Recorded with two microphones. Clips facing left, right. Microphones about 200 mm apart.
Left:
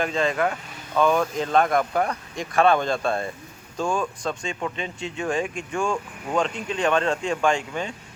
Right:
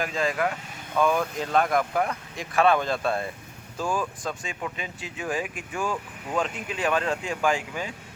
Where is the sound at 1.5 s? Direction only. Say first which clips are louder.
Left 2 dB; 40° left (ahead or behind).